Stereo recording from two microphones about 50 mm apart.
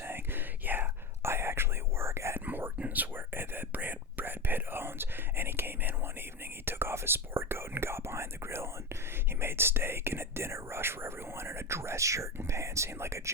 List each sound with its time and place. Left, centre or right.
0.0 s whispering: right
1.2 s whispering: right
2.5 s whispering: right
2.7 s whispering: right
12.5 s a sound: right